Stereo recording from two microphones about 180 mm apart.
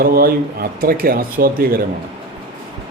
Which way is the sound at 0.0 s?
55° right (ahead or behind).